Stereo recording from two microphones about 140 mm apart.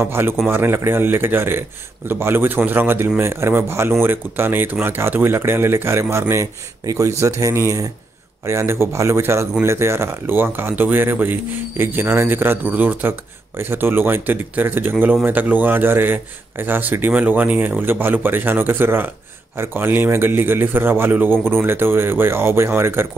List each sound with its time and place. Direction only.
0.0 s speech: 15° right (ahead or behind)